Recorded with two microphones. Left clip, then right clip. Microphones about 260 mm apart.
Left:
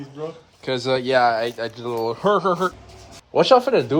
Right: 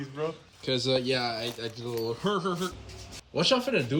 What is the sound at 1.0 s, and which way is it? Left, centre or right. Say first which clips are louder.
Speech: left 12 dB; left.